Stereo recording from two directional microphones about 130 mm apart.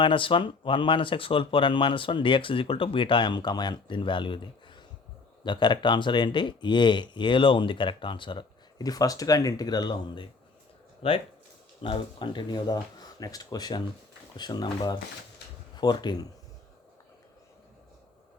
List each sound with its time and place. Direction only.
0.0 s speech: 40° left (ahead or behind)
11.0 s speech: 45° left (ahead or behind)